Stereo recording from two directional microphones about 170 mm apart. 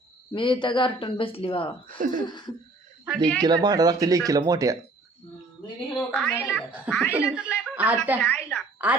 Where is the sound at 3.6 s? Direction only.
20° right (ahead or behind).